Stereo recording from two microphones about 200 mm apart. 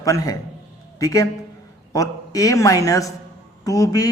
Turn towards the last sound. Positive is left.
turn(degrees=15)  # may be behind; listen again after turning